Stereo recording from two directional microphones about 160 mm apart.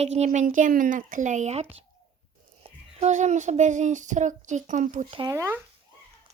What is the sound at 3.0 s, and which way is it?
Speech, 45° right (ahead or behind).